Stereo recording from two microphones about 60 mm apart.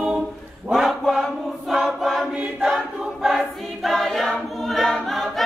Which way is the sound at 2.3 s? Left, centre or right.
Centre.